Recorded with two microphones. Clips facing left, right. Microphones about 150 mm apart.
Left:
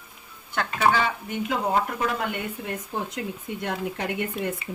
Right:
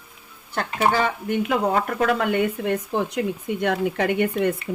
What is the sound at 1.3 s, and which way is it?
Speech, 65° right (ahead or behind).